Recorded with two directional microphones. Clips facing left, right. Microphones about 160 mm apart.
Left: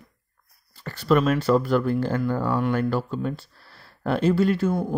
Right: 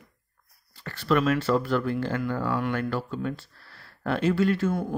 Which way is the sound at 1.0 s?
40° left (ahead or behind).